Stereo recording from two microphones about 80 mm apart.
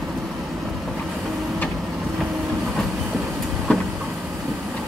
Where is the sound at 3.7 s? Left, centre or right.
Centre.